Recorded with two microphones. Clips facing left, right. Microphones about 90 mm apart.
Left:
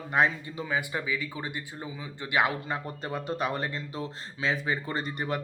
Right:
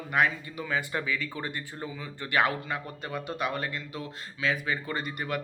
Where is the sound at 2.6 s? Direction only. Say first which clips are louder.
Left 2 dB; 30° left (ahead or behind).